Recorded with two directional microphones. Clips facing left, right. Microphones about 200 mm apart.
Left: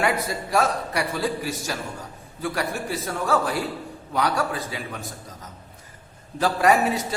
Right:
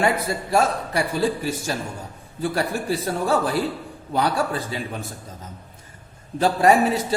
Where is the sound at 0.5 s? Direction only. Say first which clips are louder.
Right 2 dB; 30° right (ahead or behind).